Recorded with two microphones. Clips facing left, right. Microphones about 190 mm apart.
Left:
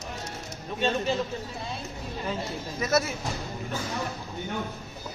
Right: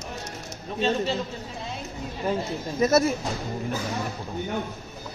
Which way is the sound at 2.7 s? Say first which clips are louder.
Right 5 dB; 30° right (ahead or behind).